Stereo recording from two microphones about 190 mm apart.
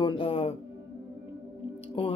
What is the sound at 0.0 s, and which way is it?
Music, 30° left (ahead or behind).